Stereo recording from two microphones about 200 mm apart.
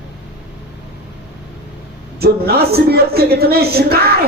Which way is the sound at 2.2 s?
50° right (ahead or behind).